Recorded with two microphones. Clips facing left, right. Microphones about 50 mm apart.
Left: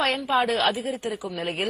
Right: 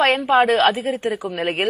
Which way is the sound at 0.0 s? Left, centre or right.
Right.